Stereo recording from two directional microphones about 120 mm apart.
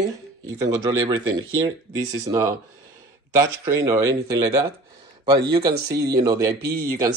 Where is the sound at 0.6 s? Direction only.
35° right (ahead or behind).